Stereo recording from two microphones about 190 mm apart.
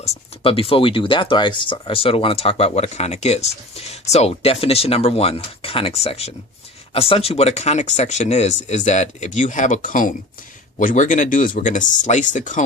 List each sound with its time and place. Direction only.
0.4 s speech: 30° left (ahead or behind)